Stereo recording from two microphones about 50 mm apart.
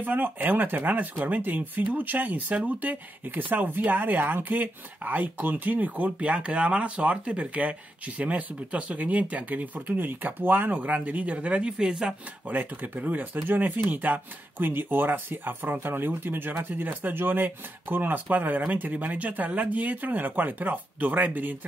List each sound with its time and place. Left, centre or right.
0.0 s speech: right; by 12.2 s centre
12.4 s speech: right